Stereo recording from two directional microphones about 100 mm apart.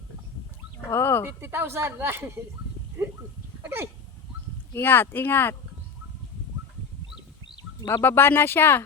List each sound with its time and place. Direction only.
0.9 s speech: 25° left (ahead or behind)
1.4 s a woman's voice: 25° right (ahead or behind)
3.6 s hiccup: 25° right (ahead or behind)
4.7 s speech: 20° left (ahead or behind)
7.4 s a sound: 50° left (ahead or behind)
8.0 s speech: 20° left (ahead or behind)